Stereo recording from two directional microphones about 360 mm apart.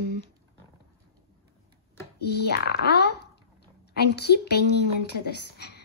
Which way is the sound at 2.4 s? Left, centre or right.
Left.